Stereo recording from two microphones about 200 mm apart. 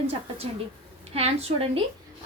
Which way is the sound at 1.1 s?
30° right (ahead or behind).